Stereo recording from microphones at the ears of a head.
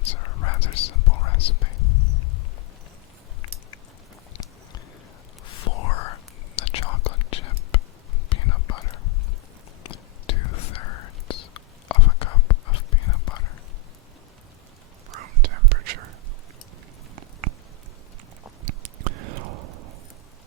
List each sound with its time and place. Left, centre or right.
0.0 s whispering: left
5.5 s whispering: left
15.1 s whispering: right
18.6 s a sound: right